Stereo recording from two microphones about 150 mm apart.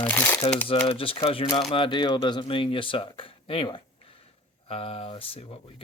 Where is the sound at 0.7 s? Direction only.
35° left (ahead or behind).